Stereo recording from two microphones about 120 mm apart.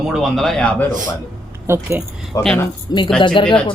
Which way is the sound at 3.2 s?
45° left (ahead or behind).